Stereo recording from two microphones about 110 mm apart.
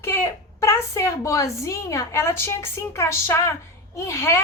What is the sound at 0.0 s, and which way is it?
A woman's voice, 25° left (ahead or behind).